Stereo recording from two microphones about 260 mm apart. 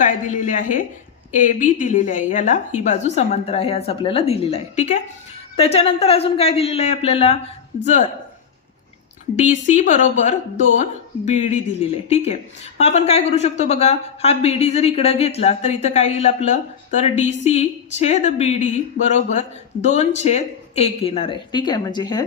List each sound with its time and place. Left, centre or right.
0.0 s a woman's voice: left
9.3 s speech: left